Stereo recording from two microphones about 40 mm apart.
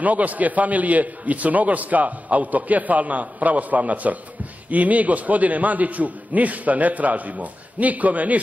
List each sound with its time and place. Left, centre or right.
0.0 s a man's voice: right